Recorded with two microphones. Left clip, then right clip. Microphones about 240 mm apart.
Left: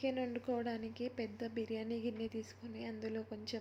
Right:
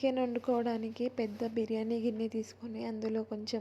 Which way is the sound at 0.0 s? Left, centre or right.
Centre.